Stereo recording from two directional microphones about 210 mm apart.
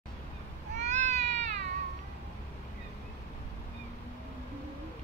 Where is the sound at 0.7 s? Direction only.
35° right (ahead or behind).